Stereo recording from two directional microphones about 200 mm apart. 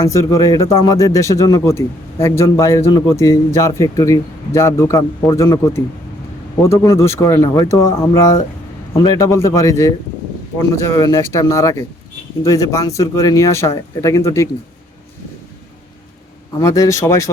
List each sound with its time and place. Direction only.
0.0 s speech: 15° left (ahead or behind)
10.9 s speech: 15° left (ahead or behind)
16.6 s speech: 15° left (ahead or behind)